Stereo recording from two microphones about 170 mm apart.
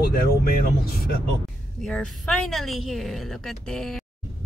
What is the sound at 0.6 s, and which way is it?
Speech, 60° left (ahead or behind).